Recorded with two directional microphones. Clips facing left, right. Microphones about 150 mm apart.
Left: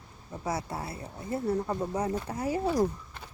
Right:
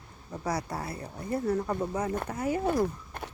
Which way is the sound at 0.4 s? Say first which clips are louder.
Right 1 dB; 25° left (ahead or behind).